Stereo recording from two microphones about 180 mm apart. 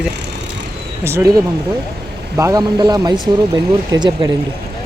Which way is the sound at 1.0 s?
15° right (ahead or behind).